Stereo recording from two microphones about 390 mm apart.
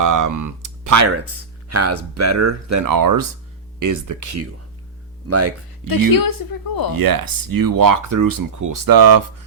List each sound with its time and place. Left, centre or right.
0.0 s speech: right
6.1 s speech: left
6.9 s speech: right